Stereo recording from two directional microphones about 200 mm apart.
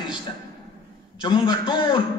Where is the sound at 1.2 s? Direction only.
25° left (ahead or behind).